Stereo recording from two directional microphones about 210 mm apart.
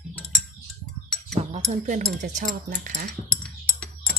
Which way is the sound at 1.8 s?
40° right (ahead or behind).